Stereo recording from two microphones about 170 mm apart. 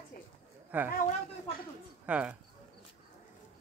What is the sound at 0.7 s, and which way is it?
Speech, 10° right (ahead or behind).